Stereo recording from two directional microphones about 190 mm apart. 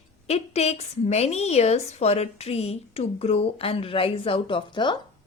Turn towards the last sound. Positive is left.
turn(degrees=25)  # may be behind; listen again after turning